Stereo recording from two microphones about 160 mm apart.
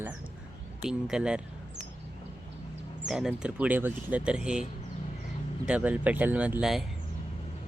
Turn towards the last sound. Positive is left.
turn(degrees=-5)  # may be behind; listen again after turning